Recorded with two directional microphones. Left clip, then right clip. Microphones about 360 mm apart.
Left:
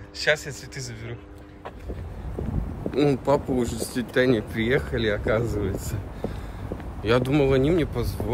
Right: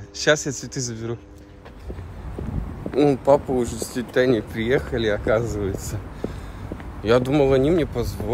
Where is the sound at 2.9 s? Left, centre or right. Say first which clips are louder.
Right 5 dB; centre.